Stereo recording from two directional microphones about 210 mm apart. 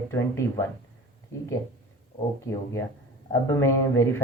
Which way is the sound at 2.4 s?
15° left (ahead or behind).